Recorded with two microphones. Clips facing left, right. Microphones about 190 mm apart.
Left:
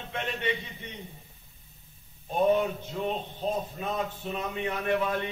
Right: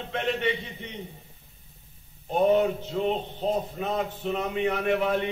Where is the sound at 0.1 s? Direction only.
20° right (ahead or behind).